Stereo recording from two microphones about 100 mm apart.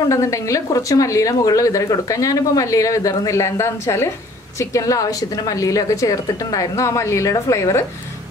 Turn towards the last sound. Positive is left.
turn(degrees=30)  # may be behind; listen again after turning